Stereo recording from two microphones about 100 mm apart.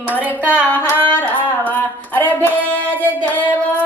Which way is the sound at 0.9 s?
20° left (ahead or behind).